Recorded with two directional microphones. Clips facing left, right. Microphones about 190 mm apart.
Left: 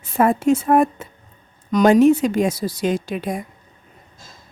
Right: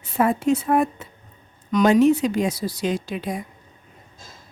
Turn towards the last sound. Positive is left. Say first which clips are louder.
# left 3 dB
turn(degrees=50)  # may be behind; listen again after turning